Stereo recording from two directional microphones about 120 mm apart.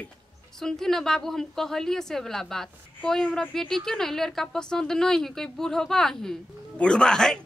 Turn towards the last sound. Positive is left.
turn(degrees=5)  # may be behind; listen again after turning